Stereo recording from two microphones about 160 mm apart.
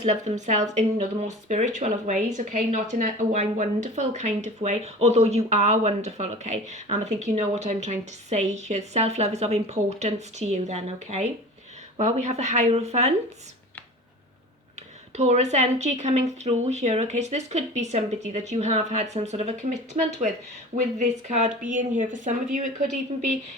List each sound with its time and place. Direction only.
0.0 s speech: 45° right (ahead or behind)
15.1 s speech: 45° right (ahead or behind)